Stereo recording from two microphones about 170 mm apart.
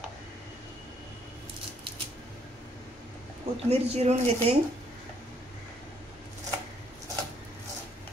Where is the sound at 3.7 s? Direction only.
40° right (ahead or behind).